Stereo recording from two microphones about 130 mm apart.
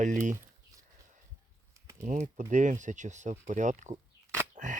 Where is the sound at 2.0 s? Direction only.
65° right (ahead or behind).